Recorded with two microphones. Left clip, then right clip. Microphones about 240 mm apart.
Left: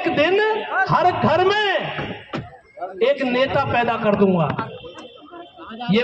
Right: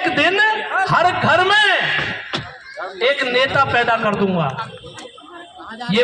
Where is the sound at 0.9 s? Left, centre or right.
Right.